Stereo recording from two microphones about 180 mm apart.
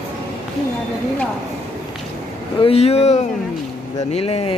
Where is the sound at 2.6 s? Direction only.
35° left (ahead or behind).